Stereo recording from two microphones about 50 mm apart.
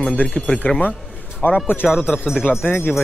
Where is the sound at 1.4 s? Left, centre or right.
Left.